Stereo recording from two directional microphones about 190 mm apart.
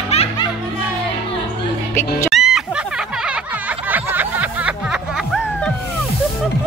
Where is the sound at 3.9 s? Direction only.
10° right (ahead or behind).